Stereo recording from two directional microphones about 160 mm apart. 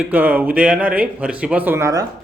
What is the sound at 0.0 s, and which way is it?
Speech, 10° right (ahead or behind).